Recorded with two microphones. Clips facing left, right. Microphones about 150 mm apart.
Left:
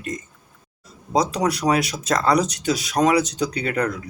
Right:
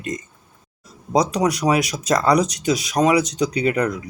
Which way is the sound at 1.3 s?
10° right (ahead or behind).